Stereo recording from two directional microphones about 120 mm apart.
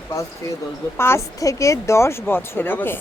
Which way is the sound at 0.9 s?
20° left (ahead or behind).